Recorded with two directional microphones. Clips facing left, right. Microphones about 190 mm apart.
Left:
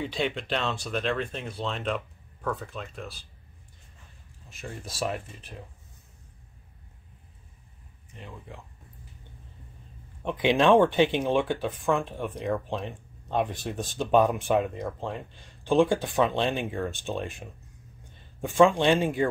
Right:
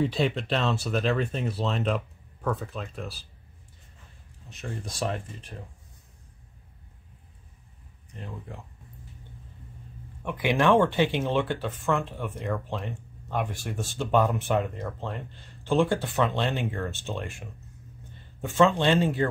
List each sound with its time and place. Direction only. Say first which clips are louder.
0.0 s speech: right 4 dB; centre (ahead or behind)
4.6 s speech: right 1 dB; 5° left (ahead or behind)
8.1 s speech: right 3 dB; centre (ahead or behind)
10.2 s speech: left 2 dB; 20° left (ahead or behind)